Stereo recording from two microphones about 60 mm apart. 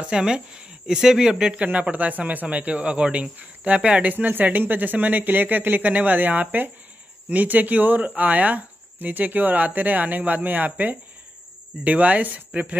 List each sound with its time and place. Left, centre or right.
0.0 s speech: centre
1.5 s speech: right